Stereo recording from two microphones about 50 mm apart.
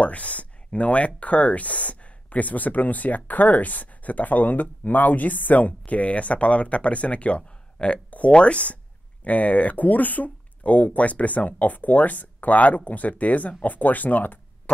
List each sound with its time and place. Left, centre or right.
0.0 s speech: left